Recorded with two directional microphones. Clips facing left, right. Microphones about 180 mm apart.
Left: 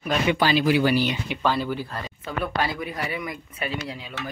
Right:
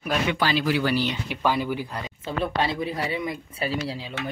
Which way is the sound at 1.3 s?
10° right (ahead or behind).